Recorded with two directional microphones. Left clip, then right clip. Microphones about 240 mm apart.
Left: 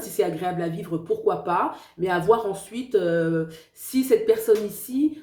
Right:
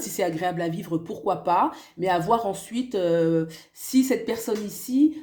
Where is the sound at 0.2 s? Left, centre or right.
Right.